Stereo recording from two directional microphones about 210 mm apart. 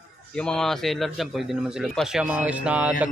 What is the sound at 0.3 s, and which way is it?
A man's voice, 5° left (ahead or behind).